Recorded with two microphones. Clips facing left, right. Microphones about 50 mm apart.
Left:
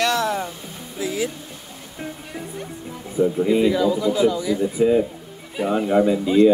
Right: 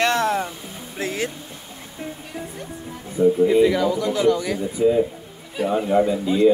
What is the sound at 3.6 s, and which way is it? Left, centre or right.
Speech, right.